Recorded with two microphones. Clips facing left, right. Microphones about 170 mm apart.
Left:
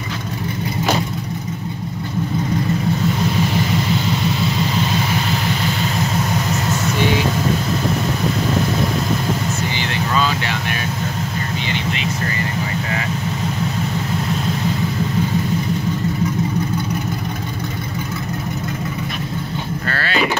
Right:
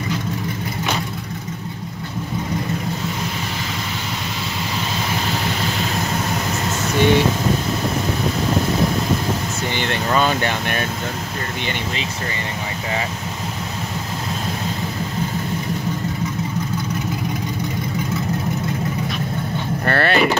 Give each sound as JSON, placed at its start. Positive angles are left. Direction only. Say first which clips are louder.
{"t": 9.8, "sound": "vehicle", "louder": "right 3 dB", "side_deg": -55}
{"t": 19.9, "sound": "vehicle", "louder": "right 9 dB", "side_deg": -60}